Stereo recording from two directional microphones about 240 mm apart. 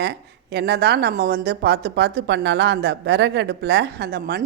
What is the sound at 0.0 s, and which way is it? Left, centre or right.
A woman's voice, right.